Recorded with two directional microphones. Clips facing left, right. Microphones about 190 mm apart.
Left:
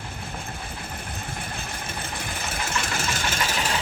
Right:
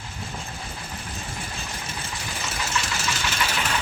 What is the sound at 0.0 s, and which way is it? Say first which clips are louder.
Vehicle: left 1 dB; 55° left (ahead or behind).